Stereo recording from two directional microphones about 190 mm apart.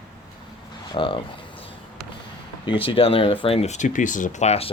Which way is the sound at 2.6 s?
25° left (ahead or behind).